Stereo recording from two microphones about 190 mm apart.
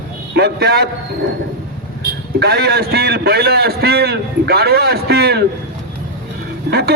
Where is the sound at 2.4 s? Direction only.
55° right (ahead or behind).